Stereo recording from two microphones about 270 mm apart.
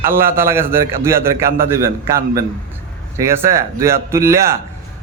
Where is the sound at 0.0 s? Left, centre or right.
Centre.